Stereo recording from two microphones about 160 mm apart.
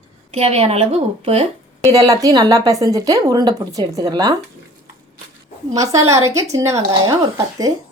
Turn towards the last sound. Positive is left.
turn(degrees=-25)  # may be behind; listen again after turning